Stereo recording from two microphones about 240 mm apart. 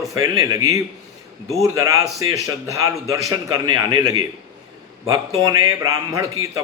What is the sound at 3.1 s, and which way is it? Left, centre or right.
Speech, centre.